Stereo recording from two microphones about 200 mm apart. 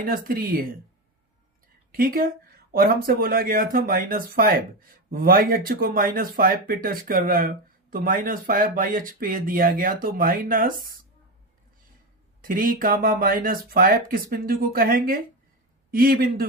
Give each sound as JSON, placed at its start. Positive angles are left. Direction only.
{"t": 0.0, "sound": "speech", "side_deg": -45}
{"t": 1.9, "sound": "speech", "side_deg": -45}
{"t": 12.4, "sound": "speech", "side_deg": -45}